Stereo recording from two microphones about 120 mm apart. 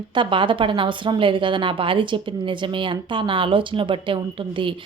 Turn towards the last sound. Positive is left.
turn(degrees=-45)  # may be behind; listen again after turning